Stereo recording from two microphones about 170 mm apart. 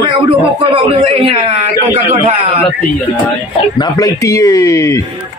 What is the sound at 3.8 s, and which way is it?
A man's voice, 20° left (ahead or behind).